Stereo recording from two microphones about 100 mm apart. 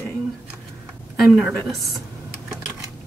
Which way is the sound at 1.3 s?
10° right (ahead or behind).